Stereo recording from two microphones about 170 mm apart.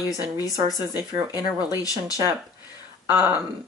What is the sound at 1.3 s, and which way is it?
Speech, 20° left (ahead or behind).